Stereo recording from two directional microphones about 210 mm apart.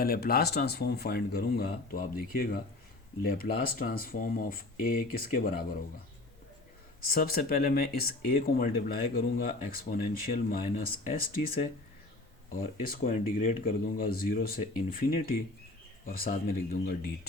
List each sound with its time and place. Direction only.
0.0 s speech: 45° left (ahead or behind)
7.0 s speech: 45° left (ahead or behind)
12.5 s speech: 45° left (ahead or behind)